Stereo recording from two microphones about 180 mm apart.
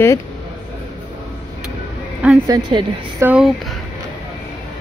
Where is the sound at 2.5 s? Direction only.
25° right (ahead or behind).